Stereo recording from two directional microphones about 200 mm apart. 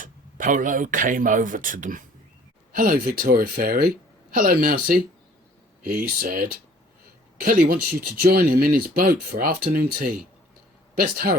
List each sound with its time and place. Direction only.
0.0 s speech: 40° right (ahead or behind)